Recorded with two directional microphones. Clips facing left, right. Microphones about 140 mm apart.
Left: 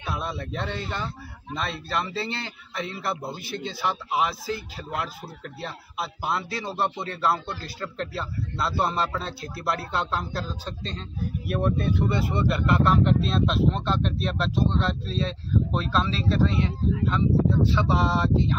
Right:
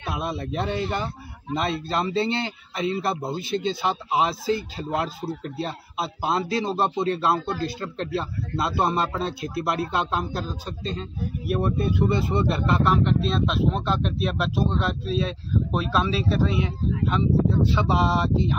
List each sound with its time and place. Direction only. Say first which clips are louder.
0.0 s a man's voice: right 2 dB; 20° right (ahead or behind)
12.1 s a man's voice: right 2 dB; 25° right (ahead or behind)
12.8 s speech: even; centre (ahead or behind)